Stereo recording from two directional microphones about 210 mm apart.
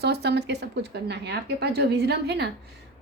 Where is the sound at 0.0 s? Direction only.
50° right (ahead or behind).